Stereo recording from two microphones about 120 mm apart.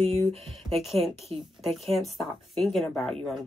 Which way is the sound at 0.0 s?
50° right (ahead or behind).